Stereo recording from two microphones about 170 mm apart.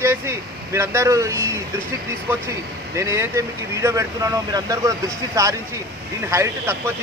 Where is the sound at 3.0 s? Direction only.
15° right (ahead or behind).